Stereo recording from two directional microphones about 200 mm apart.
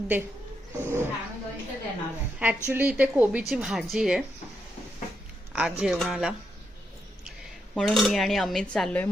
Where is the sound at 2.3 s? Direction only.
10° right (ahead or behind).